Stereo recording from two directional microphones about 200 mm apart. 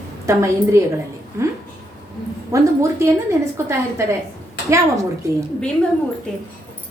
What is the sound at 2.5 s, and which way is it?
Speech, 15° right (ahead or behind).